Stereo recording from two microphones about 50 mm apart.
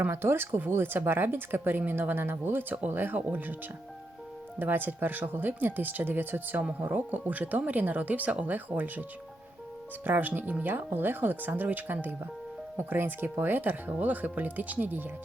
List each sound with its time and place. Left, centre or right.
0.1 s speech: right
3.2 s speech: right
4.6 s speech: right